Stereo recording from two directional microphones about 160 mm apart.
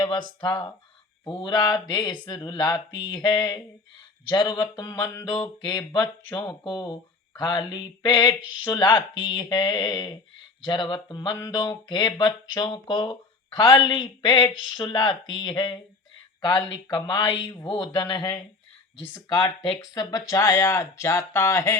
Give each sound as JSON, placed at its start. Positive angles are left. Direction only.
{"t": 0.0, "sound": "speech", "side_deg": 25}
{"t": 19.4, "sound": "speech", "side_deg": 35}